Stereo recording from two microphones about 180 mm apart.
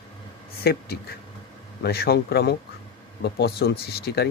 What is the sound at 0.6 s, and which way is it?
Speech, 60° left (ahead or behind).